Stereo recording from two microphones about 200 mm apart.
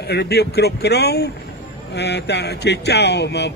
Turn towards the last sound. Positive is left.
turn(degrees=60)  # may be behind; listen again after turning